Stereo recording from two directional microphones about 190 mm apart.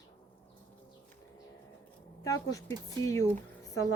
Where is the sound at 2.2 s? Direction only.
15° left (ahead or behind).